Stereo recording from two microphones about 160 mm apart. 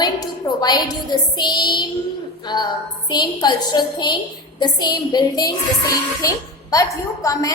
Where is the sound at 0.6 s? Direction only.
25° left (ahead or behind).